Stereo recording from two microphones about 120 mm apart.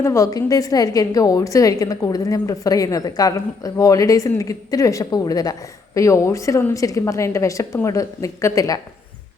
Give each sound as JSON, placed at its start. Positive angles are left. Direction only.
{"t": 0.0, "sound": "a woman's voice", "side_deg": 25}